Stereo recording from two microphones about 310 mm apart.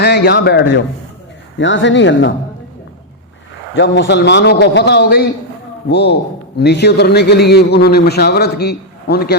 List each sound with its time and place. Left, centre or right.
0.0 s a man's voice: left
3.8 s a man's voice: left